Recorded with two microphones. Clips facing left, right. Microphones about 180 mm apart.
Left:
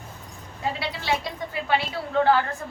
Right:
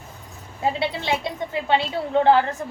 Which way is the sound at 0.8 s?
25° right (ahead or behind).